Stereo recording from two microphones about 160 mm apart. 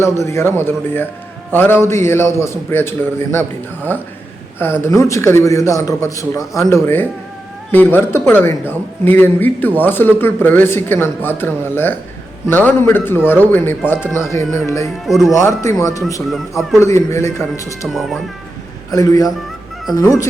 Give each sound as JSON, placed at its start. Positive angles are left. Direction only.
{"t": 0.0, "sound": "a man's voice", "side_deg": 15}
{"t": 15.0, "sound": "speech", "side_deg": 0}
{"t": 15.3, "sound": "a man's voice", "side_deg": 20}
{"t": 17.8, "sound": "speech", "side_deg": 0}
{"t": 18.9, "sound": "a man's voice", "side_deg": 20}